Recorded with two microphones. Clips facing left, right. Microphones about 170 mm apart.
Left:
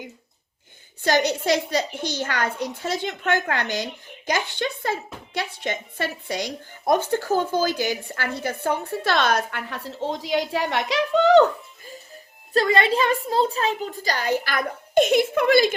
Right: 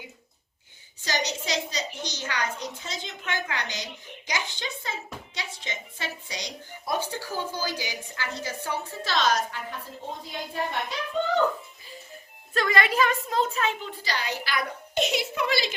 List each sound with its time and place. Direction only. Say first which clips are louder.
1.0 s a woman's voice: left 9 dB; 55° left (ahead or behind); by 11.4 s 80° left
12.5 s a child's voice: left 4 dB; 30° left (ahead or behind); by 15.7 s 55° left (ahead or behind)